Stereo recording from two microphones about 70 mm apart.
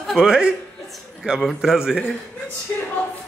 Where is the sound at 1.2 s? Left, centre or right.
Centre.